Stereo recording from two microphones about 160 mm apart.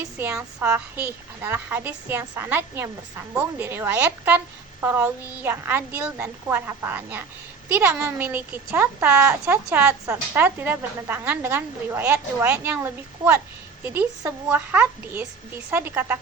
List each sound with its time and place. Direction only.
0.0 s a woman's voice: 20° right (ahead or behind)